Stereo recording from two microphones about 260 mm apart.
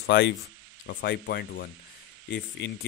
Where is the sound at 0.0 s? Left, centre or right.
Left.